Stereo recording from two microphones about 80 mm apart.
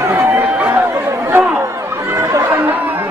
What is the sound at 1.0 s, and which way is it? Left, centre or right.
Chatter, right.